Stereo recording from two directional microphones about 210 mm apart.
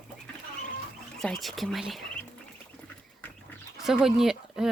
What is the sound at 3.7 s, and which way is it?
Speech, centre (ahead or behind).